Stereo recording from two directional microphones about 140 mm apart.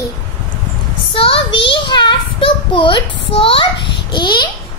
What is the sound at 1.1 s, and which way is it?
Child singing, 40° left (ahead or behind).